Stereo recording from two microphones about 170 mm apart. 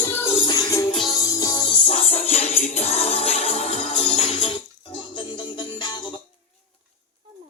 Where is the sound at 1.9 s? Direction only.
35° left (ahead or behind).